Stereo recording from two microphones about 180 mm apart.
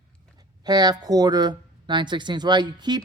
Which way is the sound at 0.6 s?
20° right (ahead or behind).